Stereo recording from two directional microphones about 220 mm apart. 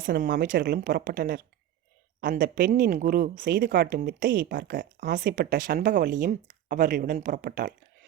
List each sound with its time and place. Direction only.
0.0 s speech: 45° right (ahead or behind)